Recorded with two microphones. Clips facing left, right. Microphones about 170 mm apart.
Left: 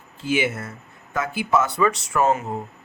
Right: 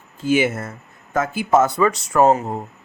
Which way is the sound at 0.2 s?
45° right (ahead or behind).